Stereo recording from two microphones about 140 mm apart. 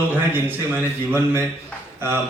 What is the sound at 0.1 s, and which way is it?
A man's voice, 15° right (ahead or behind).